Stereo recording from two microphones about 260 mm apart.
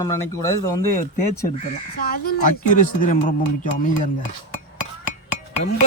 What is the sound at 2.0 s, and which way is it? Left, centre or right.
Speech, left.